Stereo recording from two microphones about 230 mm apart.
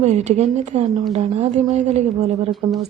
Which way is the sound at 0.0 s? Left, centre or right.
Right.